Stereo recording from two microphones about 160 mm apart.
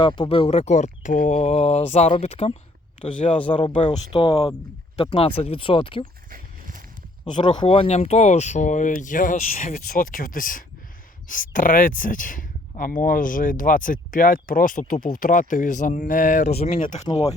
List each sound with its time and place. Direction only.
0.0 s speech: 30° left (ahead or behind); by 3.3 s 45° left (ahead or behind)
3.5 s speech: 30° left (ahead or behind)
6.3 s horse: 60° right (ahead or behind)
7.3 s speech: 30° left (ahead or behind)